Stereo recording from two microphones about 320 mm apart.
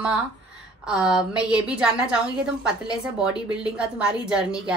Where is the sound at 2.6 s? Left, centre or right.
Centre.